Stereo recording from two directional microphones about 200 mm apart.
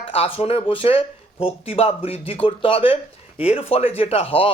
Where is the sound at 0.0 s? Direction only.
25° left (ahead or behind).